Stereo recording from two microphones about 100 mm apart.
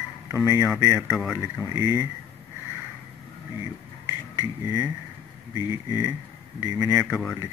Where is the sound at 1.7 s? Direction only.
40° right (ahead or behind).